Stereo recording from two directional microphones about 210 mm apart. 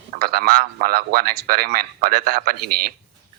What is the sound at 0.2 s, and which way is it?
Speech, 45° right (ahead or behind).